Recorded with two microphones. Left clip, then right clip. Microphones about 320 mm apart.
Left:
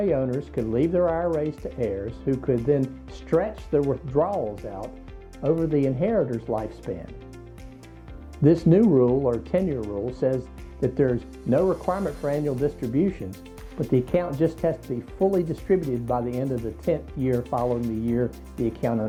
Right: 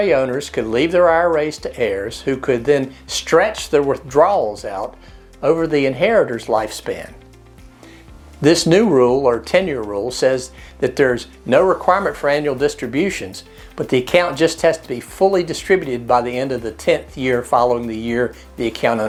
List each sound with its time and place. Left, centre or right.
0.0 s speech: centre
8.4 s speech: centre
9.5 s speech: centre
17.5 s speech: centre
18.0 s speech: centre